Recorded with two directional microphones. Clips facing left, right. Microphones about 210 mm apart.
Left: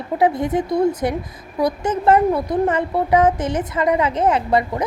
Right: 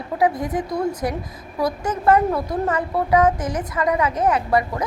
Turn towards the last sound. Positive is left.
turn(degrees=25)  # may be behind; listen again after turning